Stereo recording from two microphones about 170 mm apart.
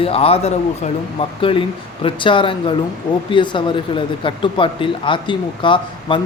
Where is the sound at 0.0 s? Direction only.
35° left (ahead or behind).